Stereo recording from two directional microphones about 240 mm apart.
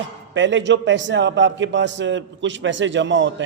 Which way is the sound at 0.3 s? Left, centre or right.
Right.